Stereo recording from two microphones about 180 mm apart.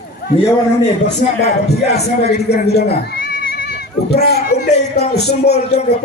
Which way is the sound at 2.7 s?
60° left (ahead or behind).